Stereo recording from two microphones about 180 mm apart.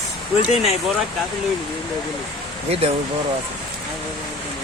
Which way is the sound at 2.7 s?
35° right (ahead or behind).